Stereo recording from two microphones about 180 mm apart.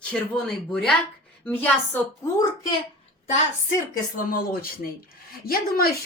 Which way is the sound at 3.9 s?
55° left (ahead or behind).